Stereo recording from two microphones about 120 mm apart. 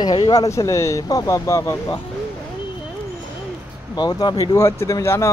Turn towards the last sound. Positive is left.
turn(degrees=25)  # may be behind; listen again after turning